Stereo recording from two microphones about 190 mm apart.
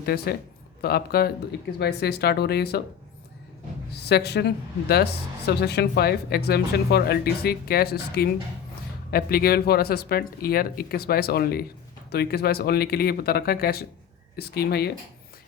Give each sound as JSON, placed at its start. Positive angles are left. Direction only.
{"t": 0.0, "sound": "speech", "side_deg": 55}
{"t": 3.9, "sound": "speech", "side_deg": 60}